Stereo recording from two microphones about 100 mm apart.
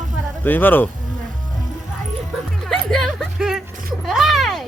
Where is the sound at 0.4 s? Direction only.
20° left (ahead or behind).